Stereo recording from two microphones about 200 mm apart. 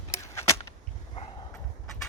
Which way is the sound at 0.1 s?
15° left (ahead or behind).